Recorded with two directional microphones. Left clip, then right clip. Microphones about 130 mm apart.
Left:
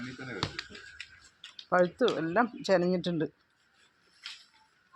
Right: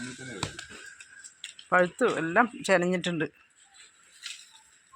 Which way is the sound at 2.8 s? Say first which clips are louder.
Right 2 dB; 35° right (ahead or behind).